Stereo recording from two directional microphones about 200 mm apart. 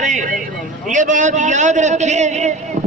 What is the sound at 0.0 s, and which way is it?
A man's voice, 40° right (ahead or behind).